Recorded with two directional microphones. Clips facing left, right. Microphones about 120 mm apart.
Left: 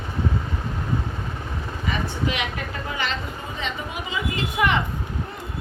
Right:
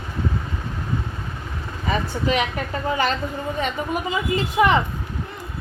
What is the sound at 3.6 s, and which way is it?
Speech, 50° right (ahead or behind).